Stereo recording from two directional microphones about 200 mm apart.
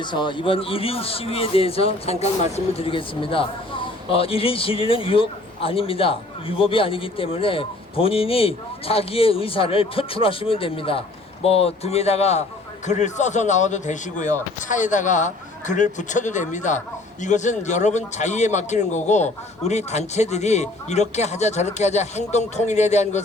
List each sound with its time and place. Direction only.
0.0 s a man's voice: 25° left (ahead or behind)